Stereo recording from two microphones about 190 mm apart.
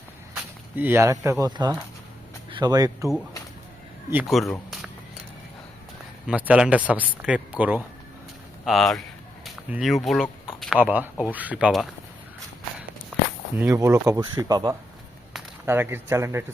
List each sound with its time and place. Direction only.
0.8 s speech: 10° right (ahead or behind)
4.1 s speech: 5° right (ahead or behind)
6.2 s speech: 5° right (ahead or behind)
13.6 s speech: 15° right (ahead or behind)